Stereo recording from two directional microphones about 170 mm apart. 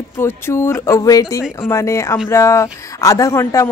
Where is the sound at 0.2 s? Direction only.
15° left (ahead or behind).